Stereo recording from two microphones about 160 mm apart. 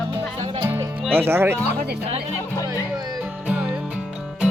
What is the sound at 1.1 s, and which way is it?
Speech, 15° right (ahead or behind).